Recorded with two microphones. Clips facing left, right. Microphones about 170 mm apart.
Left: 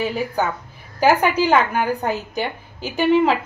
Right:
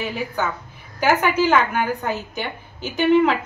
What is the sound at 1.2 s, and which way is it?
A woman's voice, 35° left (ahead or behind).